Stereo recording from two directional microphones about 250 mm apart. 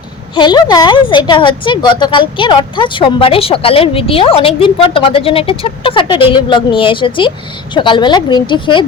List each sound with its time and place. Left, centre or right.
0.3 s a woman's voice: centre